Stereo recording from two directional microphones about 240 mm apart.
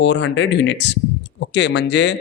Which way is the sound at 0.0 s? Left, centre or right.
Left.